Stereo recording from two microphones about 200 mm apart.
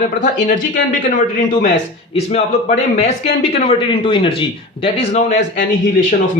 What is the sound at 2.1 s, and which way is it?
A man's voice, 35° left (ahead or behind).